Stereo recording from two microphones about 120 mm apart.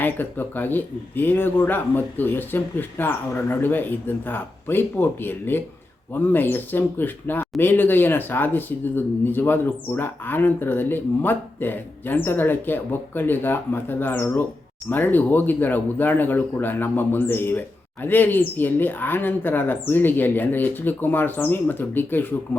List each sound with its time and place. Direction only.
0.0 s speech: 15° left (ahead or behind)